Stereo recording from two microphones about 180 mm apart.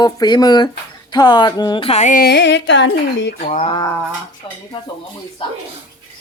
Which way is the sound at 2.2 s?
75° left (ahead or behind).